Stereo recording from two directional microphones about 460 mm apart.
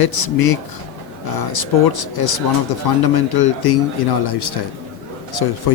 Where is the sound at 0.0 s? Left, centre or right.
Left.